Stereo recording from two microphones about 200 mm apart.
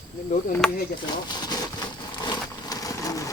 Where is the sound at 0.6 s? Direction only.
5° left (ahead or behind).